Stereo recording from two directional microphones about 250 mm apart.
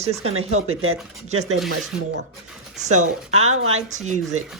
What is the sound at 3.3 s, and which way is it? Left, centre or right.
Speech, right.